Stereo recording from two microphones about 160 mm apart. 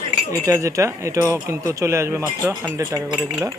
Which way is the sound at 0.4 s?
20° right (ahead or behind).